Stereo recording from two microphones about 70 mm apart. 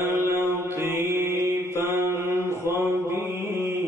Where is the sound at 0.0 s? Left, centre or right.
Right.